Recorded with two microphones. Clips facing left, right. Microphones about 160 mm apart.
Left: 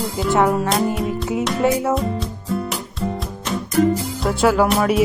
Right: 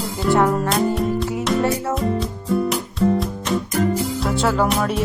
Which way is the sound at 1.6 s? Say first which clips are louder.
Left 3 dB; 15° left (ahead or behind).